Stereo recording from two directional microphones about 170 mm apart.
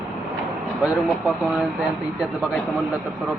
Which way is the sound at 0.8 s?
10° right (ahead or behind).